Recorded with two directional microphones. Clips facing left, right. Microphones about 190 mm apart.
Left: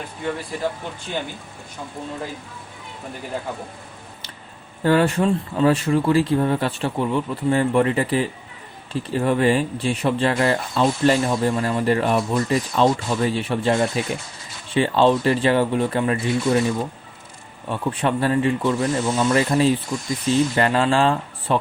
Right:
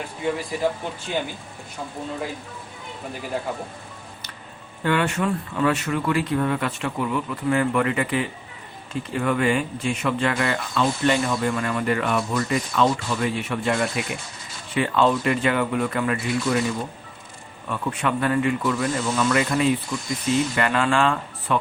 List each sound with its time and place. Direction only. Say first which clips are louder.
0.5 s speech: right 2 dB; 10° right (ahead or behind)
4.8 s speech: left 5 dB; 35° left (ahead or behind)